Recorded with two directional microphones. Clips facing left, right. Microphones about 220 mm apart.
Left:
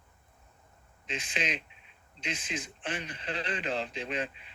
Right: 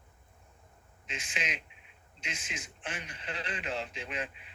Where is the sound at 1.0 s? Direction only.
35° left (ahead or behind).